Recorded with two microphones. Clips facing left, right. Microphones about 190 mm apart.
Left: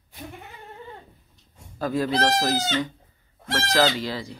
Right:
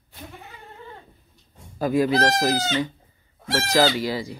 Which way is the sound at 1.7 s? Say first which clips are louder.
Right 4 dB; 10° right (ahead or behind).